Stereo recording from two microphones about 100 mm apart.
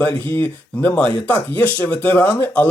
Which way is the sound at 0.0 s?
20° left (ahead or behind).